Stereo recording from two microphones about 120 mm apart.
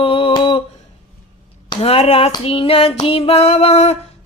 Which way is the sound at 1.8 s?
55° left (ahead or behind).